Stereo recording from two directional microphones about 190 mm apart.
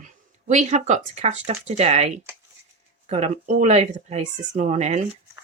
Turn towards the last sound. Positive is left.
turn(degrees=-35)  # may be behind; listen again after turning